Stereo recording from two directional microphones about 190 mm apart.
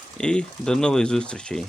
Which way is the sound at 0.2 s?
5° left (ahead or behind).